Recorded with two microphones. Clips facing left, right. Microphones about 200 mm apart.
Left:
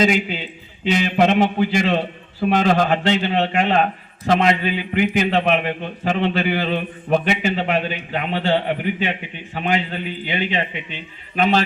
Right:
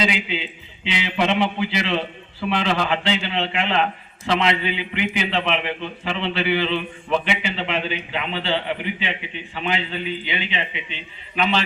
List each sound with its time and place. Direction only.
0.0 s a man's voice: 45° left (ahead or behind)